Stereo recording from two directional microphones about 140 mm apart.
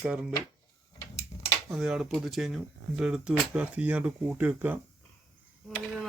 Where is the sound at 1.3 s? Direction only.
25° left (ahead or behind).